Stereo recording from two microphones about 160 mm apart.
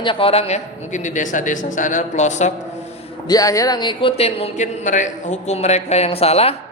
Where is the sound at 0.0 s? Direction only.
35° left (ahead or behind).